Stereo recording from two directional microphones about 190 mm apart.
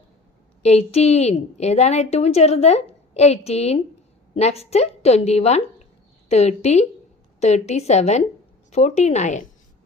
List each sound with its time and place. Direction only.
0.6 s a woman's voice: 35° left (ahead or behind)